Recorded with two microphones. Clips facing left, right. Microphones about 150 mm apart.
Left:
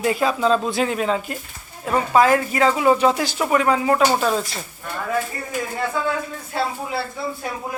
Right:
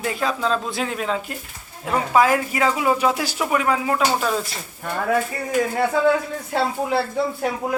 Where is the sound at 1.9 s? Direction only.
10° right (ahead or behind).